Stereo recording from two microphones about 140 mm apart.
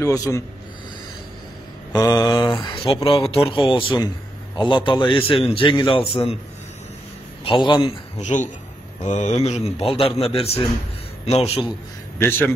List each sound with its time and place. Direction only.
0.0 s mantra: 25° left (ahead or behind)
1.9 s mantra: 30° left (ahead or behind)
2.6 s a man's voice: 40° left (ahead or behind)
7.4 s a man's voice: 35° left (ahead or behind)
8.2 s a man's voice: 60° left (ahead or behind)
12.2 s a man's voice: 15° left (ahead or behind)